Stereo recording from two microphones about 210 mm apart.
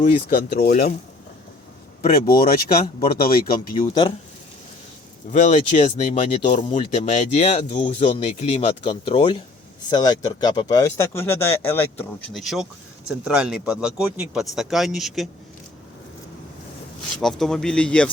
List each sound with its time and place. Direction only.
0.0 s speech: 40° left (ahead or behind)
2.0 s speech: 45° left (ahead or behind)
5.3 s speech: 35° left (ahead or behind); by 12.4 s 10° left (ahead or behind)
12.4 s speech: centre (ahead or behind)
17.2 s speech: centre (ahead or behind)